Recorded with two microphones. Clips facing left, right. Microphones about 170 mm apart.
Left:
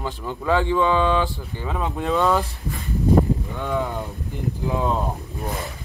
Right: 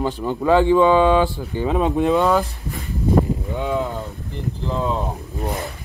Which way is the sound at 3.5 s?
10° right (ahead or behind).